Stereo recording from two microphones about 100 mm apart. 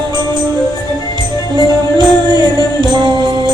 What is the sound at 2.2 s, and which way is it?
Music, 45° right (ahead or behind).